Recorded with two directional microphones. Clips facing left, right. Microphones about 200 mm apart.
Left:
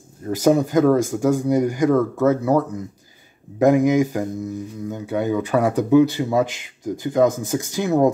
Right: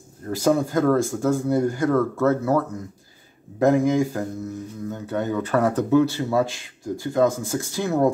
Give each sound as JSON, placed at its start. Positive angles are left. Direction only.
{"t": 0.3, "sound": "speech", "side_deg": 20}